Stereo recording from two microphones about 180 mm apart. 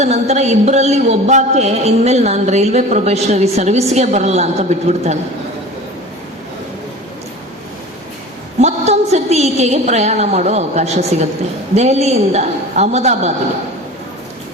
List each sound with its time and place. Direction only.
0.0 s a man's voice: 35° right (ahead or behind)
8.6 s a man's voice: 35° right (ahead or behind)